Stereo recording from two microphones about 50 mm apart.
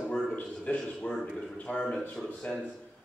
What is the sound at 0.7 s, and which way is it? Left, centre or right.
A man's voice, left.